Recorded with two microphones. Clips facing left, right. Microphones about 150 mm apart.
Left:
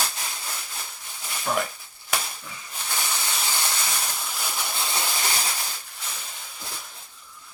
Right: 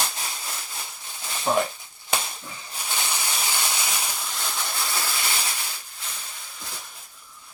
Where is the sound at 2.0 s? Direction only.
30° right (ahead or behind).